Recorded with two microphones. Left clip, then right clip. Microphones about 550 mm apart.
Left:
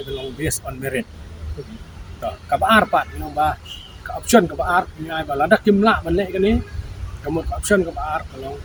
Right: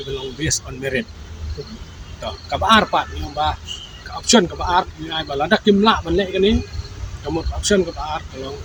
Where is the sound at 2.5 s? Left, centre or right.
Left.